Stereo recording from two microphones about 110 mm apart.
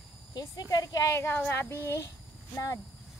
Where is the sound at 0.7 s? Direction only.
35° left (ahead or behind).